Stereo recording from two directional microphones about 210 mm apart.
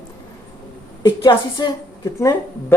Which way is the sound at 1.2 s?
20° left (ahead or behind).